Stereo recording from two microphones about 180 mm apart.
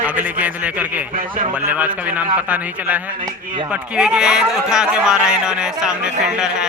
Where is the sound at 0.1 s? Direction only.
10° right (ahead or behind).